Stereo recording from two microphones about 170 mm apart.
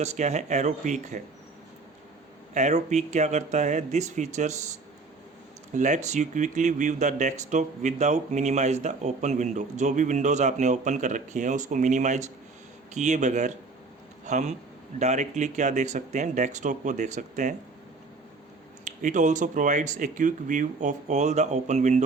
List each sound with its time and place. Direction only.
0.0 s speech: 40° right (ahead or behind)
2.6 s speech: 45° right (ahead or behind)
5.7 s speech: 45° right (ahead or behind)
18.9 s speech: 45° right (ahead or behind)